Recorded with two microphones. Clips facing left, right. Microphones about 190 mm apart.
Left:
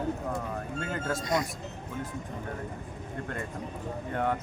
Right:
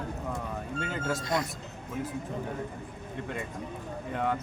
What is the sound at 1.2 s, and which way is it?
Speech, 20° left (ahead or behind).